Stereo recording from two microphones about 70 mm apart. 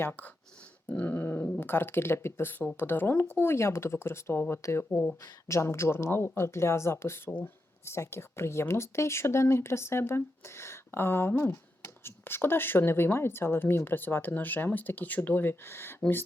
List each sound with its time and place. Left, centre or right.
0.0 s speech: left
0.9 s dog: left
1.5 s speech: left
7.3 s dog: left
7.9 s speech: left